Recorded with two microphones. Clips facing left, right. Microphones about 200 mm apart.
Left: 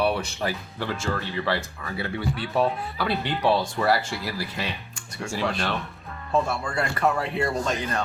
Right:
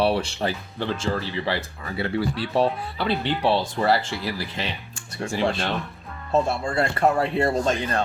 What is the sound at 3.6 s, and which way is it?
Speech, 25° right (ahead or behind).